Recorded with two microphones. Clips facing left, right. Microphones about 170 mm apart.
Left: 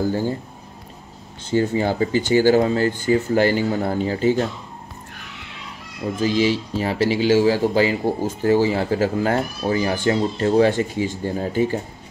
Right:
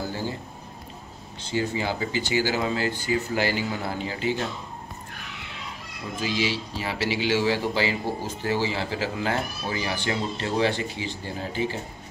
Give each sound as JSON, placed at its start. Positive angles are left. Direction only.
{"t": 1.4, "sound": "speech", "side_deg": 50}
{"t": 6.1, "sound": "speech", "side_deg": 45}